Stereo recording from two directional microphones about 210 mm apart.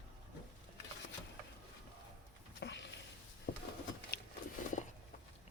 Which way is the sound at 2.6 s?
55° left (ahead or behind).